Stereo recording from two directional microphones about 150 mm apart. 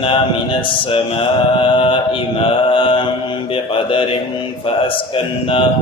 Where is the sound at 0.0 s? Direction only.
35° left (ahead or behind).